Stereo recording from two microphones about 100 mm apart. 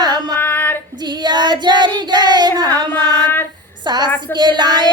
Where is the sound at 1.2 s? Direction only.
45° right (ahead or behind).